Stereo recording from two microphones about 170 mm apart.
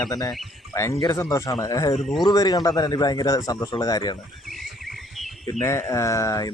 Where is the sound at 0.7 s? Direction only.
15° left (ahead or behind).